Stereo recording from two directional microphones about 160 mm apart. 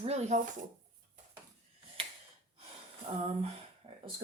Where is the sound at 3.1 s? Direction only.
40° right (ahead or behind).